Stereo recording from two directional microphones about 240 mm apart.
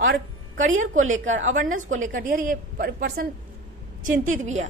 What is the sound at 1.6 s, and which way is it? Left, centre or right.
A woman's voice, right.